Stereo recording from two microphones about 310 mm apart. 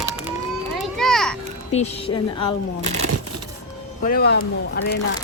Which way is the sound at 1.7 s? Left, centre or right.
Centre.